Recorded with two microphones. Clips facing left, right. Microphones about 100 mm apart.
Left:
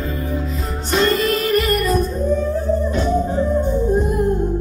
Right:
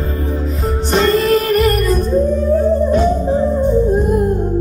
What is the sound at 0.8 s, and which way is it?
Music, 35° right (ahead or behind).